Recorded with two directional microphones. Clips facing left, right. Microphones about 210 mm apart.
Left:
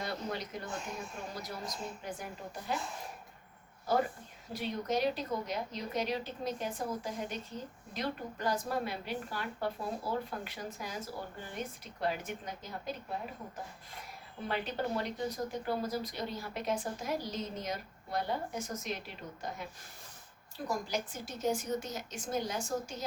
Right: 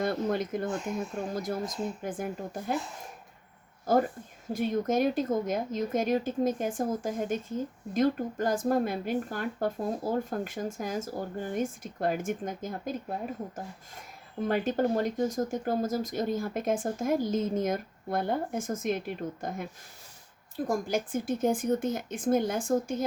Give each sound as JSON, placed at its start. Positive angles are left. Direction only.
{"t": 0.0, "sound": "a woman's voice", "side_deg": -50}
{"t": 4.5, "sound": "a woman's voice", "side_deg": -50}
{"t": 14.4, "sound": "a woman's voice", "side_deg": -45}
{"t": 20.7, "sound": "a woman's voice", "side_deg": -50}